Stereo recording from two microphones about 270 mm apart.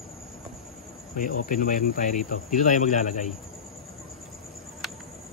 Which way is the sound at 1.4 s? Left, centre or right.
Left.